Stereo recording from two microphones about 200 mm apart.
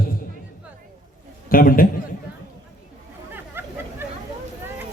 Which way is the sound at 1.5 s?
45° left (ahead or behind).